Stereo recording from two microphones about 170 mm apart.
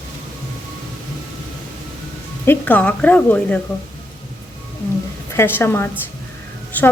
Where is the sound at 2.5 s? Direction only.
10° left (ahead or behind).